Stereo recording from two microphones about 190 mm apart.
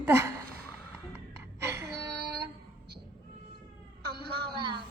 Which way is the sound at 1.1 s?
15° right (ahead or behind).